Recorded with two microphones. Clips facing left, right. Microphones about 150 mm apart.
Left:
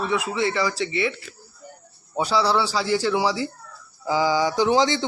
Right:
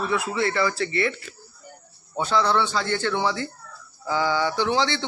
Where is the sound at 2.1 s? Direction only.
10° left (ahead or behind).